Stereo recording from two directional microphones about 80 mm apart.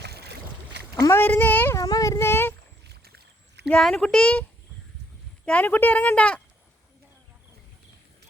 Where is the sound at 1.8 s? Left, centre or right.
Left.